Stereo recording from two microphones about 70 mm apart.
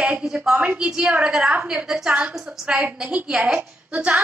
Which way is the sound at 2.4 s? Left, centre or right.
Centre.